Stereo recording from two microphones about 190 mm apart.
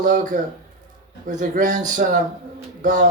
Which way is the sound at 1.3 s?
40° right (ahead or behind).